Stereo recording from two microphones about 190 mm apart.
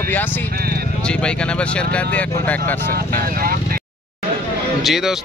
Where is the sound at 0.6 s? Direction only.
50° right (ahead or behind).